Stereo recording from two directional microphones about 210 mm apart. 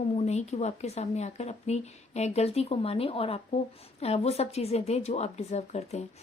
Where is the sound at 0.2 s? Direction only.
30° left (ahead or behind).